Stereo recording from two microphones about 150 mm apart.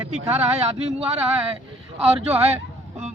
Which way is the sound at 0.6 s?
40° right (ahead or behind).